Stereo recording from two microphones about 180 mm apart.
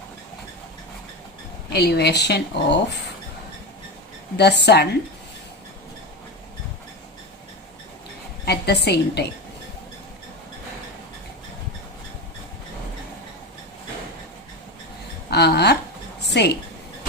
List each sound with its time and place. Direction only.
1.7 s speech: 65° left (ahead or behind)
4.4 s speech: 70° left (ahead or behind)
8.4 s a woman's voice: 65° left (ahead or behind)
15.3 s speech: 65° left (ahead or behind)
16.2 s a sound: 70° left (ahead or behind)